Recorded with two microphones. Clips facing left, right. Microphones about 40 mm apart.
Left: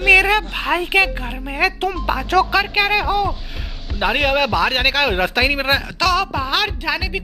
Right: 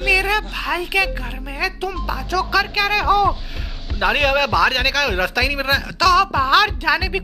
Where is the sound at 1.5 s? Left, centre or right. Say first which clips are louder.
Left 4 dB; left.